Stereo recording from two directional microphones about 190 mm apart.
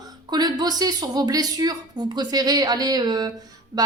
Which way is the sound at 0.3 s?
20° right (ahead or behind).